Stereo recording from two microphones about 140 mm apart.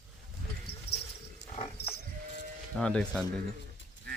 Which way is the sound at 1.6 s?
40° left (ahead or behind).